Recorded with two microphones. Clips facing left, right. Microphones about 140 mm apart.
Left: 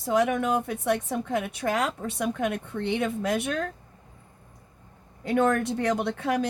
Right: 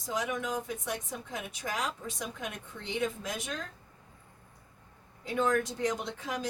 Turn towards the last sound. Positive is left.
turn(degrees=65)  # may be behind; listen again after turning